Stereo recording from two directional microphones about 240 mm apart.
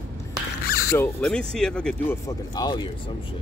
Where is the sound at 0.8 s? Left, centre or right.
Centre.